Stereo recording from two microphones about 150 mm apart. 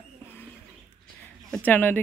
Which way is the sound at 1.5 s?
5° left (ahead or behind).